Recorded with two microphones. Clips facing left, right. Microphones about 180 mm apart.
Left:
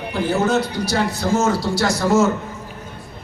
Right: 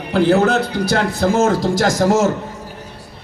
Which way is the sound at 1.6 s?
90° right.